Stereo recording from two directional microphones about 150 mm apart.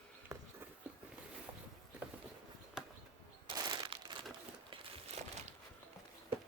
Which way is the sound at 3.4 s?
30° right (ahead or behind).